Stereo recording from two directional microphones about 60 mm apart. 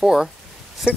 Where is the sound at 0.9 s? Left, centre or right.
Centre.